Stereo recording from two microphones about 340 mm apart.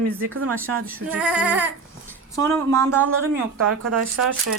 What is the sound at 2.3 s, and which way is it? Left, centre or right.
Speech, centre.